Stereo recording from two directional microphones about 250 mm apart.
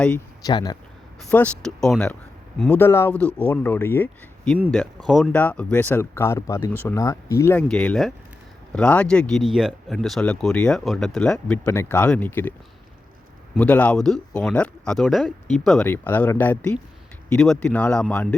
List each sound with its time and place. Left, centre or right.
0.0 s speech: centre
0.5 s speech: centre
1.3 s speech: centre